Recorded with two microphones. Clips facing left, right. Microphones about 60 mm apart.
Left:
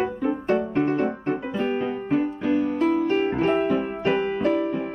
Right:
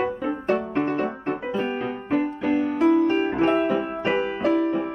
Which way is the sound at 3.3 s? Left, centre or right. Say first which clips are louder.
Right 1 dB; right.